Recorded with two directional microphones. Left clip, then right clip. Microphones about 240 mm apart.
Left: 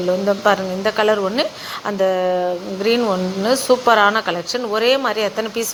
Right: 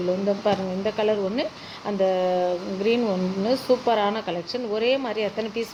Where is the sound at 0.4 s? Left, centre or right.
Centre.